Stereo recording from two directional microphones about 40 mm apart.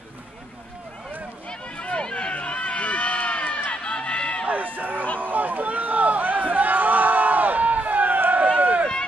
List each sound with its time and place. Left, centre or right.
1.5 s run: left
4.5 s a sound: right
8.5 s run: right